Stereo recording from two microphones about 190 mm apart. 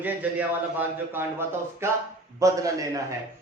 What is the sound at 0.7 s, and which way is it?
Speech, 10° right (ahead or behind).